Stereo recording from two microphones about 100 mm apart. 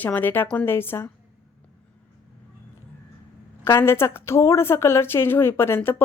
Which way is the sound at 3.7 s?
25° left (ahead or behind).